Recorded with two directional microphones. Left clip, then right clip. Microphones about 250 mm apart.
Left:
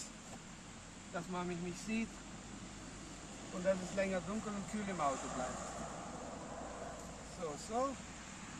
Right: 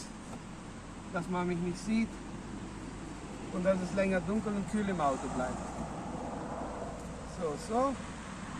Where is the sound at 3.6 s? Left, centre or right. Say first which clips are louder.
Right 6 dB; centre.